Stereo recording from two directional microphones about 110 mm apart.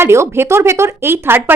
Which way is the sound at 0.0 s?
25° right (ahead or behind).